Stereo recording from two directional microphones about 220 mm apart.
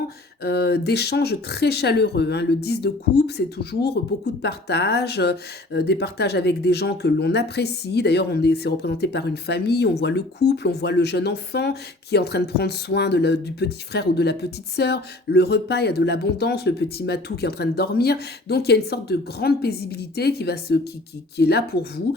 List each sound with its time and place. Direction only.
0.4 s speech: 45° left (ahead or behind)